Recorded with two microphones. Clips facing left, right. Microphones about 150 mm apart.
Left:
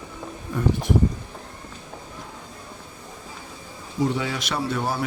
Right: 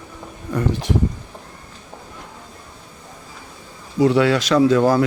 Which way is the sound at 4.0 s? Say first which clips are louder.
Right 9 dB; 85° right.